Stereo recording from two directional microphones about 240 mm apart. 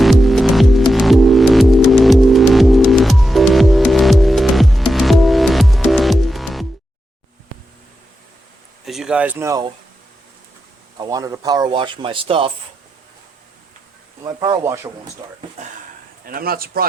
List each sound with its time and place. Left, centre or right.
0.0 s music: centre
8.9 s speech: centre
10.9 s speech: centre
14.3 s speech: centre
16.2 s speech: right